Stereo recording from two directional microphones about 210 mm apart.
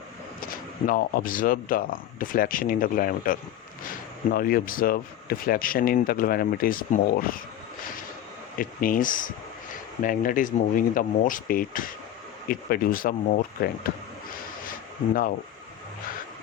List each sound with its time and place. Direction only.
0.9 s speech: 45° left (ahead or behind)
8.5 s speech: 40° left (ahead or behind)
14.7 s a sound: 40° left (ahead or behind)